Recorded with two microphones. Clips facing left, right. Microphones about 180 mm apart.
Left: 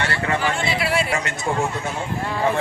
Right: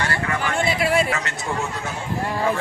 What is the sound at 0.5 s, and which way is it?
Speech, 50° right (ahead or behind).